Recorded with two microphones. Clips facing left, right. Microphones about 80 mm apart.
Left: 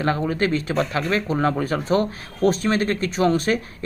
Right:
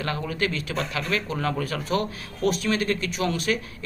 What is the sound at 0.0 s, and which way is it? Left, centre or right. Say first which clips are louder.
Speech: left 6 dB; left.